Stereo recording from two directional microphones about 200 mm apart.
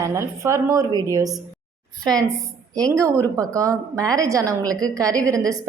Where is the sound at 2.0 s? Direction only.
20° right (ahead or behind).